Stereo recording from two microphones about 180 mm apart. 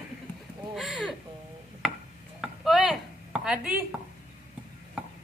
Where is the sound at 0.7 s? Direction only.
Centre (ahead or behind).